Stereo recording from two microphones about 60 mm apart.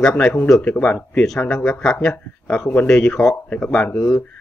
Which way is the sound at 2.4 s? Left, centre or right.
Left.